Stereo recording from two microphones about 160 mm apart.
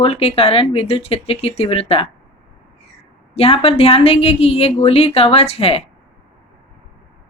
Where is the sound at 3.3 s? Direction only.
40° left (ahead or behind).